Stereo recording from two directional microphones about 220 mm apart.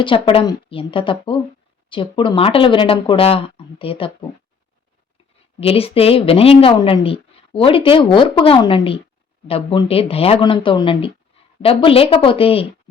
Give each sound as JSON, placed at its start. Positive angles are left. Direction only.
{"t": 0.0, "sound": "a woman's voice", "side_deg": 25}
{"t": 5.5, "sound": "a woman's voice", "side_deg": 25}